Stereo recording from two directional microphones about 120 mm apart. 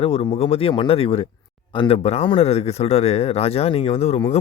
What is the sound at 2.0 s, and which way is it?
Speech, 55° left (ahead or behind).